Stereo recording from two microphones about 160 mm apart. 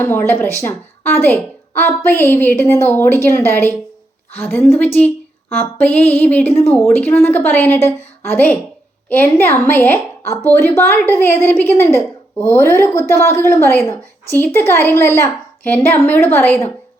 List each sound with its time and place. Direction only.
0.0 s a woman's voice: 15° left (ahead or behind)